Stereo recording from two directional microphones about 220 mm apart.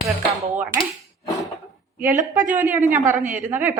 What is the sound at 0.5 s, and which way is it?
Speech, 5° right (ahead or behind).